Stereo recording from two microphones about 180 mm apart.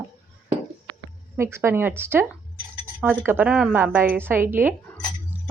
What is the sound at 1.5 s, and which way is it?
Speech, 15° right (ahead or behind).